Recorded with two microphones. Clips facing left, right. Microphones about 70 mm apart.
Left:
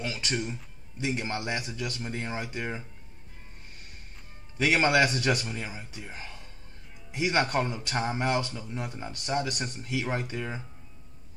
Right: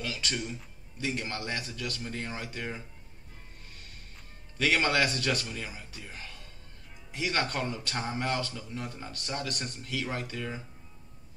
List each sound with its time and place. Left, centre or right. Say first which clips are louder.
0.0 s speech: left 3 dB; left
4.6 s speech: left 3 dB; left